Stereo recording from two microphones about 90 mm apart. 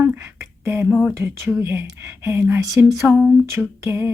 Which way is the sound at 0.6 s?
25° right (ahead or behind).